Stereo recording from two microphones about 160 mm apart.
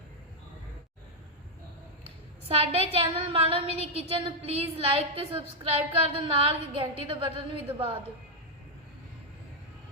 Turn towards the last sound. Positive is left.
turn(degrees=-35)  # may be behind; listen again after turning